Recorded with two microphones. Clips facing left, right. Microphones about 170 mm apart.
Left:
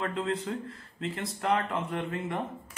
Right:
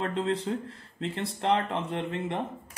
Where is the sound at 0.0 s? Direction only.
35° right (ahead or behind).